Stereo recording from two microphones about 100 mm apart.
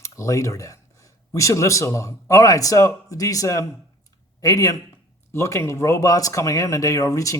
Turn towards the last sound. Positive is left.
turn(degrees=35)  # may be behind; listen again after turning